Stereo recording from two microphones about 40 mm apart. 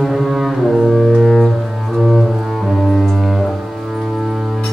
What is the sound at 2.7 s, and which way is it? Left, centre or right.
Music, centre.